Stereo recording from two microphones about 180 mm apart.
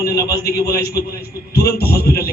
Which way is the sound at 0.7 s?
60° left (ahead or behind).